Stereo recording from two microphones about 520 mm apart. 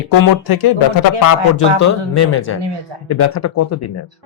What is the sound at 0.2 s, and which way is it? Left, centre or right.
Speech, left.